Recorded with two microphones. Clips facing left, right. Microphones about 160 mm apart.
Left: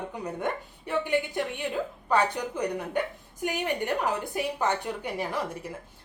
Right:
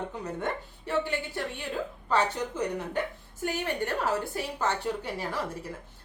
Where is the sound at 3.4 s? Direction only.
15° left (ahead or behind).